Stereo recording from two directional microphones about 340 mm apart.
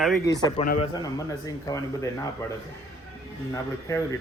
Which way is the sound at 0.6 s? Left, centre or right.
Left.